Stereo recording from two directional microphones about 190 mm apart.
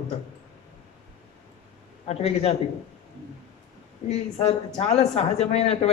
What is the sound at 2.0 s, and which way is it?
Speech, 30° left (ahead or behind).